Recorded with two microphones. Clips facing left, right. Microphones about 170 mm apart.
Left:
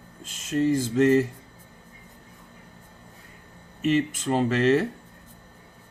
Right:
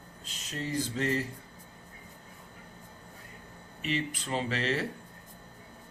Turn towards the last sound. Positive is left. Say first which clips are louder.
# left 10 dB
turn(degrees=50)  # may be behind; listen again after turning